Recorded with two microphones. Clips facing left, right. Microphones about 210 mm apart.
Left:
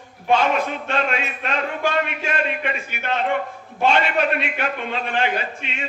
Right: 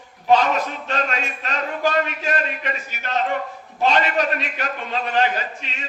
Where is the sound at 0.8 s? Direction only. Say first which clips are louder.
Left 2 dB; 40° right (ahead or behind).